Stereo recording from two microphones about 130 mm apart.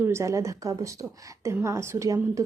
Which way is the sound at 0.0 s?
20° right (ahead or behind).